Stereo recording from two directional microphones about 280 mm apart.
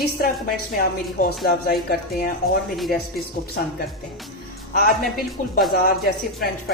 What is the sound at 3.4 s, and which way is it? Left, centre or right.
Speech, left.